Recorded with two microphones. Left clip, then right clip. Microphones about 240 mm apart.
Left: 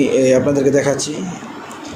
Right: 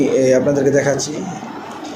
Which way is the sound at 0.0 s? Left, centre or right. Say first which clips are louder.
Even; left.